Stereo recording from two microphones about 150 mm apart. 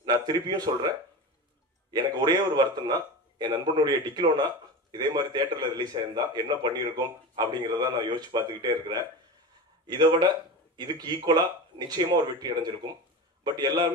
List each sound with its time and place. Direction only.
0.0 s speech: 25° right (ahead or behind)
1.9 s a man's voice: 30° right (ahead or behind)